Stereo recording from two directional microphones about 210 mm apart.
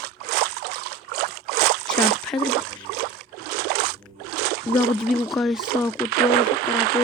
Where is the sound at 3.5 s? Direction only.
50° right (ahead or behind).